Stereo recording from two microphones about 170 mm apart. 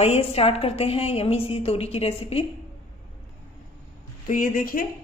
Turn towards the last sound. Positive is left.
turn(degrees=55)  # may be behind; listen again after turning